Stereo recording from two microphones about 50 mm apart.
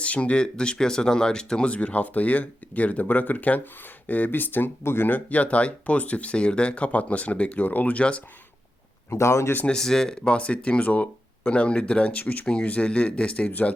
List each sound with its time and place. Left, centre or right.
0.0 s speech: left
4.8 s speech: left
9.0 s speech: left
9.6 s speech: centre
10.2 s speech: left
13.5 s speech: left